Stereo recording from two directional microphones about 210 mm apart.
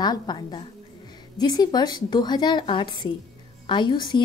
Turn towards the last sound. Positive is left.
turn(degrees=20)  # may be behind; listen again after turning